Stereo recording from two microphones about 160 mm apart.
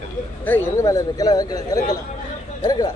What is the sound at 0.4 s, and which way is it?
A man's voice, 10° left (ahead or behind).